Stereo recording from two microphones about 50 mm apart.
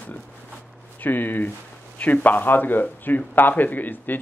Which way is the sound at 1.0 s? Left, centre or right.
Left.